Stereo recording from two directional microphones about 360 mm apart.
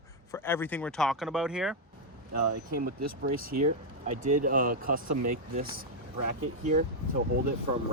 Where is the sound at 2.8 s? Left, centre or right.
Right.